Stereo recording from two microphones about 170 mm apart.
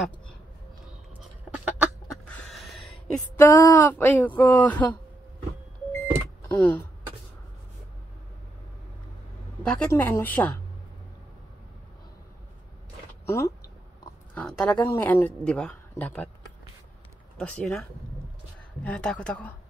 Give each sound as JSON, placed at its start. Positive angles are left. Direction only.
{"t": 1.5, "sound": "duck", "side_deg": -10}
{"t": 2.2, "sound": "a sound", "side_deg": 5}
{"t": 3.3, "sound": "speech", "side_deg": 15}
{"t": 6.5, "sound": "speech", "side_deg": 10}
{"t": 9.7, "sound": "speech", "side_deg": 10}
{"t": 13.2, "sound": "speech", "side_deg": 15}
{"t": 17.4, "sound": "speech", "side_deg": 5}